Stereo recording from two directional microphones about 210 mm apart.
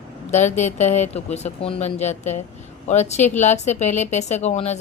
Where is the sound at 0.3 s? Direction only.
35° left (ahead or behind).